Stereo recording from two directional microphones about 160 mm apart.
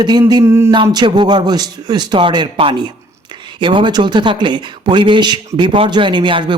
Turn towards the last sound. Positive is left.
turn(degrees=-30)  # may be behind; listen again after turning